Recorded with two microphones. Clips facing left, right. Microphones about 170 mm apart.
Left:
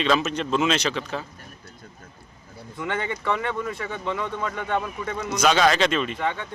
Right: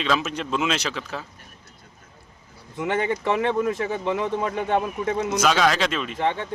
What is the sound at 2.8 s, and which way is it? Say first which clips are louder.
Speech: right 5 dB; 20° right (ahead or behind).